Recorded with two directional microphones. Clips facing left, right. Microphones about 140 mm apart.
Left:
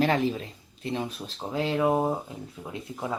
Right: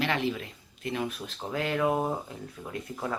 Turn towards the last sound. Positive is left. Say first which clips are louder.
# left 1 dB
turn(degrees=15)  # may be behind; listen again after turning